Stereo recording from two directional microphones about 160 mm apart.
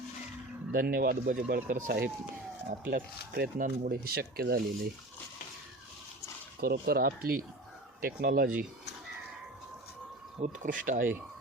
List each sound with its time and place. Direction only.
0.7 s speech: 65° right (ahead or behind)
6.6 s speech: 75° right (ahead or behind)
10.4 s speech: 55° right (ahead or behind)